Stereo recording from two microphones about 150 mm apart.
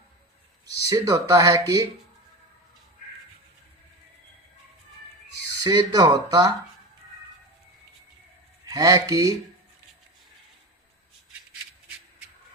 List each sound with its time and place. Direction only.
0.7 s speech: 25° right (ahead or behind)
5.6 s speech: 25° right (ahead or behind)
8.6 s speech: 25° right (ahead or behind)